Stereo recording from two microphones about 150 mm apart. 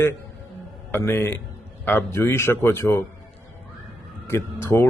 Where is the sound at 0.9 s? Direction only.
15° left (ahead or behind).